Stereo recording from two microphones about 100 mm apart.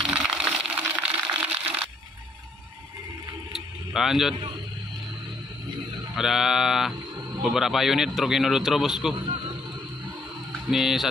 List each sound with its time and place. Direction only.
0.0 s splinter: 5° right (ahead or behind)
0.4 s a sound: 10° right (ahead or behind)
3.5 s a sound: centre (ahead or behind)
6.1 s a man's voice: 5° right (ahead or behind)
9.2 s wild animals: 55° right (ahead or behind)
10.7 s a man's voice: 5° right (ahead or behind)